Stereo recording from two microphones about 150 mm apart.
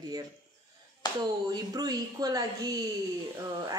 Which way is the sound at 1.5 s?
25° right (ahead or behind).